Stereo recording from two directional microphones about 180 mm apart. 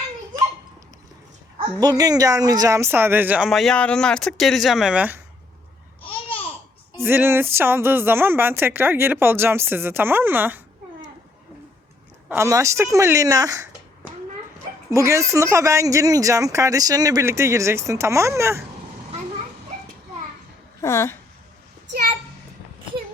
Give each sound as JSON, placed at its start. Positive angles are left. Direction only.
{"t": 1.8, "sound": "speech", "side_deg": -20}
{"t": 6.0, "sound": "babbling", "side_deg": 30}
{"t": 6.9, "sound": "speech", "side_deg": -15}
{"t": 12.3, "sound": "speech", "side_deg": -15}
{"t": 20.8, "sound": "speech", "side_deg": 15}